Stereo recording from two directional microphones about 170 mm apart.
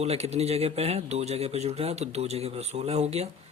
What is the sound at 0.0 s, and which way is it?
Speech, 40° right (ahead or behind).